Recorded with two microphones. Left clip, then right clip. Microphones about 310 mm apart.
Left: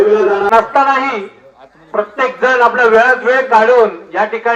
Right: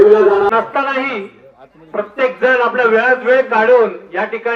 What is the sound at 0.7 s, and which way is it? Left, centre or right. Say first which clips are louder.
Speech: left 5 dB; left.